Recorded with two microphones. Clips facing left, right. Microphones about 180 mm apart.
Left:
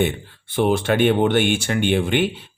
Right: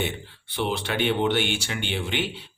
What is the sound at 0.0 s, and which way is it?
Speech, 50° left (ahead or behind).